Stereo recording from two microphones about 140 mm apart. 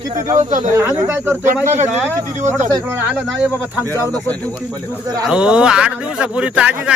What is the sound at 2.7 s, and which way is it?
Speech, 20° right (ahead or behind).